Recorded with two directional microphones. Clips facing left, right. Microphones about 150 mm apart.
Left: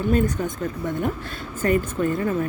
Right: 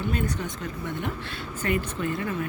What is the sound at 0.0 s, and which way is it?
Speech, 45° left (ahead or behind).